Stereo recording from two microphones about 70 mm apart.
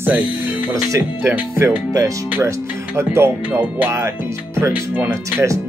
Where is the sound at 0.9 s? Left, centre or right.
Right.